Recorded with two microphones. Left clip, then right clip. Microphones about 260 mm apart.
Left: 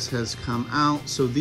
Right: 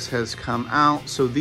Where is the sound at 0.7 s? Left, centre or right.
Centre.